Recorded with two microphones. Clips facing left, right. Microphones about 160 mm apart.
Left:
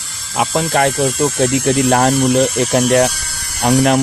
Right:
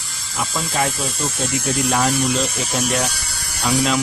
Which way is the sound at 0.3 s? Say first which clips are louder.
Left 8 dB; 65° left (ahead or behind).